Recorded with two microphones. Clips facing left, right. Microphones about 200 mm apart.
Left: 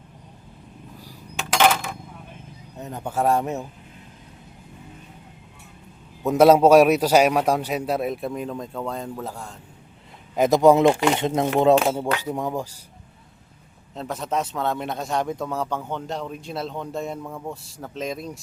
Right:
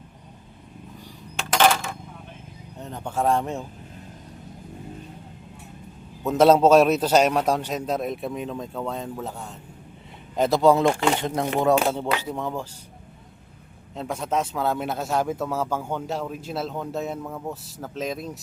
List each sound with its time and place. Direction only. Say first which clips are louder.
1.5 s coin: even; 10° left (ahead or behind)
2.7 s a man's voice: left 2 dB; 5° left (ahead or behind)
6.2 s a man's voice: left 2 dB; 10° left (ahead or behind); by 9.6 s 5° right (ahead or behind)
10.3 s a man's voice: left 3 dB; 15° left (ahead or behind)
13.9 s a man's voice: right 1 dB; 5° right (ahead or behind)